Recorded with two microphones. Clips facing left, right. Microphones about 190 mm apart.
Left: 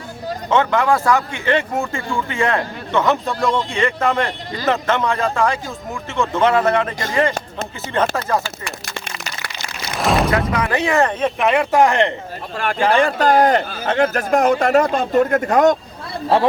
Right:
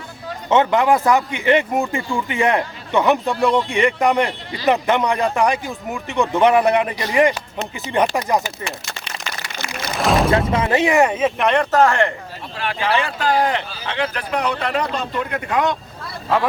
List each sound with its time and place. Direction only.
0.5 s speech: 20° right (ahead or behind)
10.0 s music: centre (ahead or behind)
10.5 s speech: 25° right (ahead or behind); by 12.1 s 20° left (ahead or behind)
12.5 s speech: 45° left (ahead or behind)
16.3 s speech: 35° left (ahead or behind)